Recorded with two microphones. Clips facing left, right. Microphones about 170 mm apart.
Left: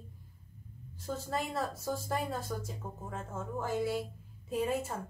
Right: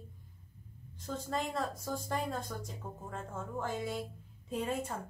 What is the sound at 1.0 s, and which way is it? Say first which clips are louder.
A woman's voice: left 1 dB; 5° left (ahead or behind).